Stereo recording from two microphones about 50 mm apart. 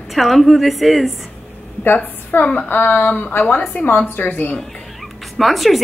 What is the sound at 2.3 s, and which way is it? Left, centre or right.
A woman's voice, left.